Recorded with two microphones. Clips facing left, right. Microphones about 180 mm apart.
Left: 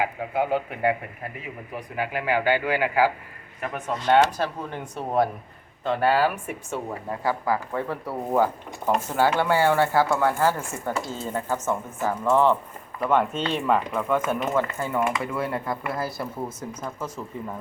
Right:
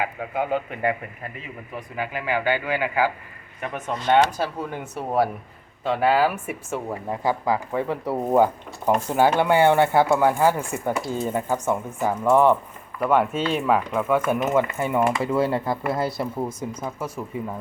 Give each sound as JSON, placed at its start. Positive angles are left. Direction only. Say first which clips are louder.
{"t": 0.0, "sound": "a man's voice", "louder": "left 1 dB", "side_deg": 5}
{"t": 4.3, "sound": "speech", "louder": "right 1 dB", "side_deg": -10}
{"t": 14.5, "sound": "speech", "louder": "right 3 dB", "side_deg": -20}
{"t": 15.0, "sound": "speech", "louder": "right 5 dB", "side_deg": -30}
{"t": 16.0, "sound": "speech", "louder": "right 4 dB", "side_deg": -20}